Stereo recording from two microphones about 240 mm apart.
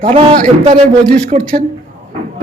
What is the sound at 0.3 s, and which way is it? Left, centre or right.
Speech, right.